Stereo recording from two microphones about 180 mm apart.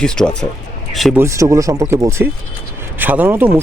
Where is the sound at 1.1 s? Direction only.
15° right (ahead or behind).